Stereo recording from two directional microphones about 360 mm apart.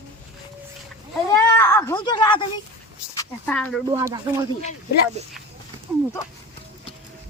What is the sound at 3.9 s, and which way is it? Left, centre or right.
Speech, centre.